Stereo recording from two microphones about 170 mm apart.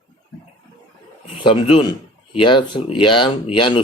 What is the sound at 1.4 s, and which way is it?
Speech, 30° left (ahead or behind).